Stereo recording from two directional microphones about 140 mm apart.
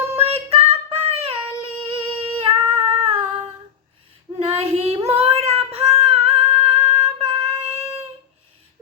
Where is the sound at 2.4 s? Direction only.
40° right (ahead or behind).